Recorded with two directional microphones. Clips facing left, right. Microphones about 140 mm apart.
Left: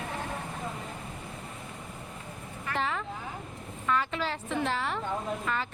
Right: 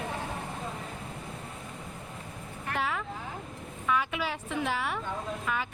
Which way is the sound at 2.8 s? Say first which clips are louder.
Left 1 dB; 5° right (ahead or behind).